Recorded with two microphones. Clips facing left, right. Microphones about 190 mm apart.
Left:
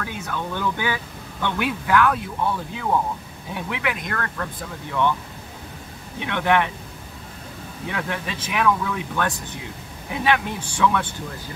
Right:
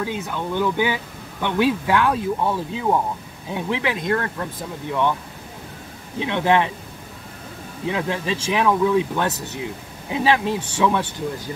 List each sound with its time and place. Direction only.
0.0 s speech: 20° right (ahead or behind)
6.1 s speech: 20° right (ahead or behind)
7.9 s speech: 25° right (ahead or behind)